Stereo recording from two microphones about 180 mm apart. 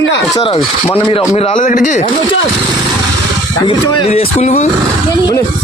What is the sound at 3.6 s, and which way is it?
Speech, 35° left (ahead or behind).